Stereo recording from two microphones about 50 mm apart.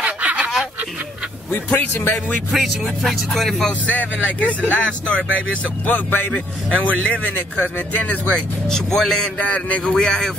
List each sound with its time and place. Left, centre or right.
0.0 s a sound: right
0.4 s a sound: centre
1.7 s speech: left
2.5 s speech: centre
3.8 s a man's voice: left; by 9.3 s centre
9.4 s a man's voice: left